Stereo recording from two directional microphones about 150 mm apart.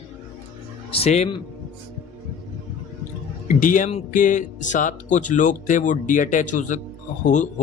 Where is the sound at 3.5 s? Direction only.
60° left (ahead or behind).